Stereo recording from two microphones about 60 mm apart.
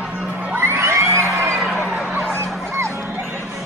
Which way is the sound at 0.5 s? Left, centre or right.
Right.